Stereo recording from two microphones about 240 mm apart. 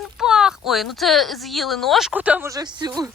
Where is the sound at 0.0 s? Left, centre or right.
Centre.